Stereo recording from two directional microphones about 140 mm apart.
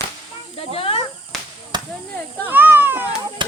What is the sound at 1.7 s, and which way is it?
Chop, 30° right (ahead or behind).